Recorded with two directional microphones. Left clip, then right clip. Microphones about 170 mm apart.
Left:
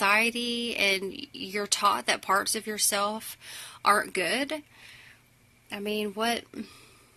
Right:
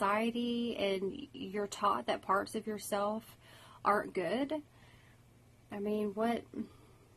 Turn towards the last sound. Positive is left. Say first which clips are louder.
# left 6 dB
turn(degrees=20)  # may be behind; listen again after turning